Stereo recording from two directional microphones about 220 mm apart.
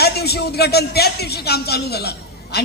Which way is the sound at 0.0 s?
45° left (ahead or behind).